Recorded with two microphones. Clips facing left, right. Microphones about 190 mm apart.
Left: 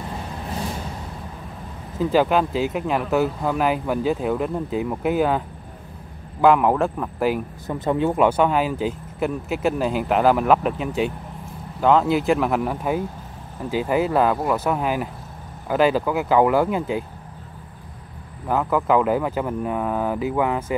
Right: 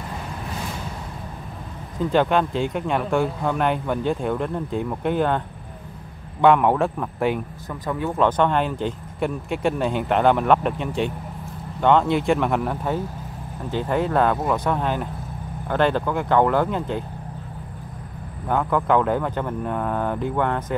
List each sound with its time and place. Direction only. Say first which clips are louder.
2.0 s speech: left 1 dB; 5° left (ahead or behind)
6.4 s speech: even; centre (ahead or behind)
7.6 s speech: left 7 dB; 25° left (ahead or behind)
8.2 s speech: right 2 dB; 10° left (ahead or behind)
18.5 s speech: left 1 dB; 5° left (ahead or behind)